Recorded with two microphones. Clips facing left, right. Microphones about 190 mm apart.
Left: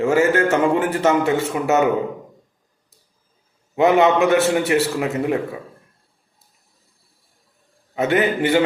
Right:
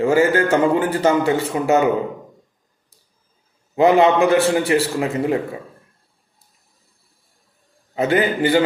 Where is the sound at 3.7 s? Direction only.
30° right (ahead or behind).